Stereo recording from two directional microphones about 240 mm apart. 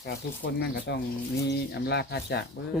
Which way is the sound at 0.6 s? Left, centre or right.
Left.